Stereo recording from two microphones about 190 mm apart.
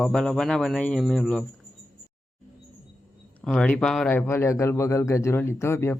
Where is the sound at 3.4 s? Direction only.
5° left (ahead or behind).